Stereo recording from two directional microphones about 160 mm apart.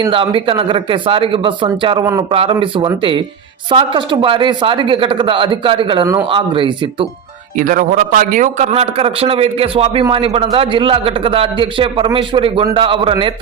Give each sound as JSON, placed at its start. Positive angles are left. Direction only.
{"t": 0.1, "sound": "a man's voice", "side_deg": -35}
{"t": 7.5, "sound": "a man's voice", "side_deg": -60}